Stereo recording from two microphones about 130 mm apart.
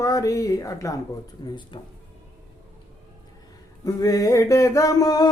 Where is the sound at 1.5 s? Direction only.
35° left (ahead or behind).